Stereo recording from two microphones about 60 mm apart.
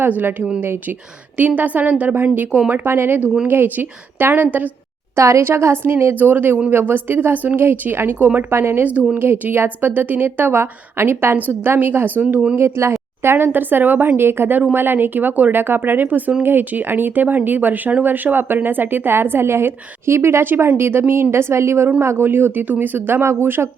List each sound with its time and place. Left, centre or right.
0.1 s a woman's voice: right
5.1 s a woman's voice: right
5.4 s a woman's voice: right
6.1 s a woman's voice: right
8.4 s a woman's voice: right
8.8 s a woman's voice: right
9.1 s a woman's voice: right
12.5 s a woman's voice: right
22.2 s a woman's voice: right